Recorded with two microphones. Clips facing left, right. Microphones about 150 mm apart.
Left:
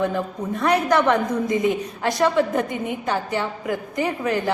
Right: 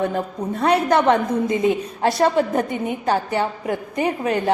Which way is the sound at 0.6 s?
25° right (ahead or behind).